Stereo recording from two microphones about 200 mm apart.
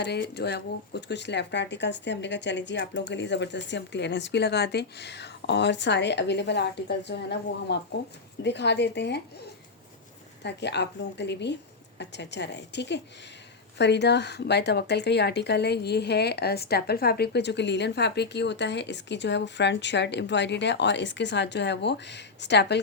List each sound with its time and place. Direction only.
0.0 s a woman's voice: 60° left (ahead or behind)
10.4 s a woman's voice: 60° left (ahead or behind)